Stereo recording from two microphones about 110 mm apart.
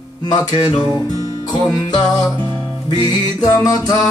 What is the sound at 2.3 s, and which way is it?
Music, 20° left (ahead or behind).